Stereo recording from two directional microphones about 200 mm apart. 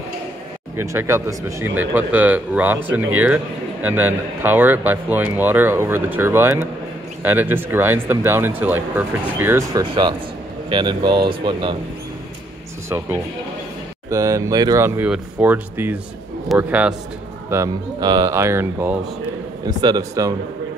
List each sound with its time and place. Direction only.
0.7 s speech: 15° right (ahead or behind)
3.8 s speech: 10° right (ahead or behind)
14.1 s speech: 15° right (ahead or behind)
17.5 s speech: 15° right (ahead or behind)